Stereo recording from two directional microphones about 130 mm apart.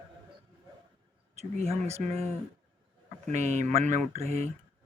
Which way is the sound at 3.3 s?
65° right (ahead or behind).